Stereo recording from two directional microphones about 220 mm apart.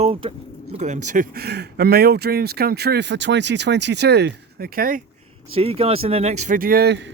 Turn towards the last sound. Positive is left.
turn(degrees=-45)  # may be behind; listen again after turning